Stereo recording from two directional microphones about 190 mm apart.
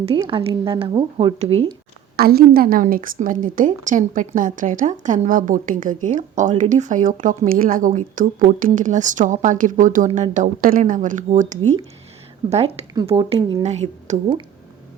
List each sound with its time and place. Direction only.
0.2 s speech: 25° right (ahead or behind)
2.1 s a woman's voice: 55° right (ahead or behind); by 12.8 s 35° right (ahead or behind)
12.9 s speech: 25° right (ahead or behind); by 14.2 s 40° right (ahead or behind)